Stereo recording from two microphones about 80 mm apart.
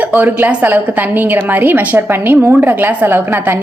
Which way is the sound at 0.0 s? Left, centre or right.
Right.